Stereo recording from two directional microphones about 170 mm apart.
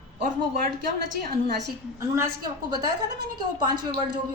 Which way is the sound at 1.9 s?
15° right (ahead or behind).